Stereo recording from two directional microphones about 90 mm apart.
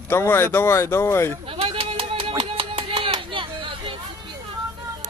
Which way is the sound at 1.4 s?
90° right.